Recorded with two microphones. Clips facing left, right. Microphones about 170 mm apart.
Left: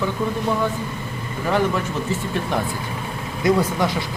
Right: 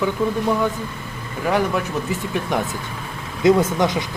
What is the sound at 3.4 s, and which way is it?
Speech, 20° right (ahead or behind).